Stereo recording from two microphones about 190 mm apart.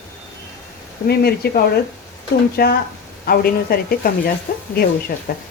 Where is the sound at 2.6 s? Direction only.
55° left (ahead or behind).